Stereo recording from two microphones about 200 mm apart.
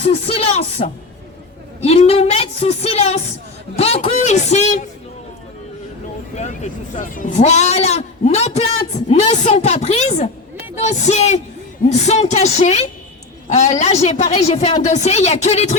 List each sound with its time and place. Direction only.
0.0 s a sound: 30° left (ahead or behind)
1.8 s a man's voice: 30° left (ahead or behind)
6.3 s speech: 35° left (ahead or behind)